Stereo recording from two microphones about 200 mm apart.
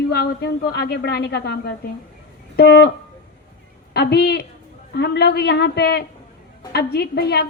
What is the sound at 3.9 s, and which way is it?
A woman's voice, 55° left (ahead or behind).